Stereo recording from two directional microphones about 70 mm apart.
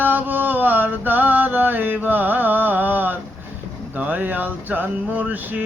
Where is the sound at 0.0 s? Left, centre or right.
Right.